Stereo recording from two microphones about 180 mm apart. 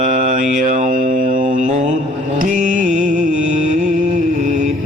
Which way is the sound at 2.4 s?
45° right (ahead or behind).